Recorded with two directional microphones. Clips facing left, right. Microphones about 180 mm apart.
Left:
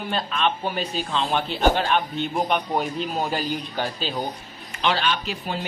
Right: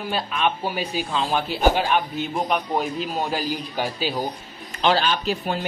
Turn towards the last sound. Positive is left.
turn(degrees=-40)  # may be behind; listen again after turning